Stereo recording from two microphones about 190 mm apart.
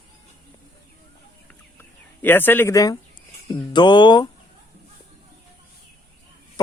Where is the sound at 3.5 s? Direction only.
25° left (ahead or behind).